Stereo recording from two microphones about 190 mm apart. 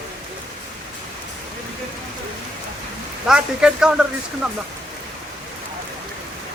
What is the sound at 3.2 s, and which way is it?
Speech, 5° right (ahead or behind).